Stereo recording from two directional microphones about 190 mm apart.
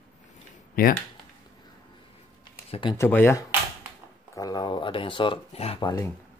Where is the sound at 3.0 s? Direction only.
10° left (ahead or behind).